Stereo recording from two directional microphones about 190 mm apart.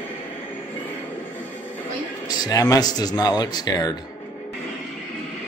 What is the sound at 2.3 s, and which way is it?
Speech, 20° left (ahead or behind).